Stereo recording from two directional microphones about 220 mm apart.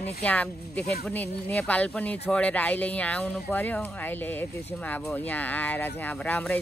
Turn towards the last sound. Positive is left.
turn(degrees=10)  # may be behind; listen again after turning